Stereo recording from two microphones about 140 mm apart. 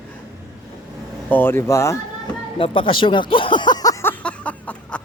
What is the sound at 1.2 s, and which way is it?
Speech, 15° left (ahead or behind).